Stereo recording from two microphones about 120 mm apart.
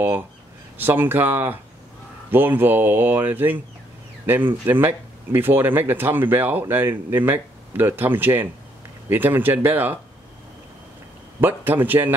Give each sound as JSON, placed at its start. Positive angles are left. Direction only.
{"t": 0.7, "sound": "speech", "side_deg": -15}
{"t": 11.4, "sound": "speech", "side_deg": -15}